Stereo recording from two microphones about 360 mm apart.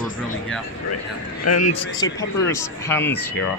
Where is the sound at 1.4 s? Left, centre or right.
Left.